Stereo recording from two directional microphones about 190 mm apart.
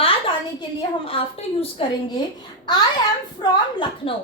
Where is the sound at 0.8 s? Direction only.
30° left (ahead or behind).